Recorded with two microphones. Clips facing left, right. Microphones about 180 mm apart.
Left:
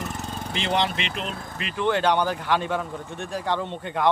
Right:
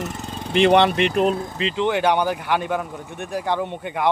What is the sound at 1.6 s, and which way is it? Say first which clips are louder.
Speech: right 3 dB; 20° right (ahead or behind).